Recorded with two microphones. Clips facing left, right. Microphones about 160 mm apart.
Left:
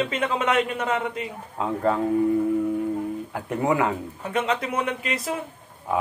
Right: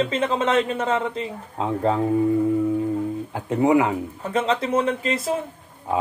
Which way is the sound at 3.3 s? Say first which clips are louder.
Right 6 dB; 20° right (ahead or behind).